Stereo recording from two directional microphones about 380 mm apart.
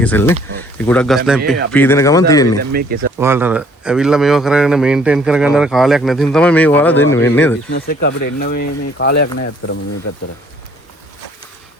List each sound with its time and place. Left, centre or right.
0.0 s speech: centre
2.6 s speech: right
3.2 s speech: centre
7.7 s speech: left